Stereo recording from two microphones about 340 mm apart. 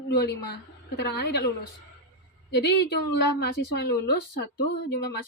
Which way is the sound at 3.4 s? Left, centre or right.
Left.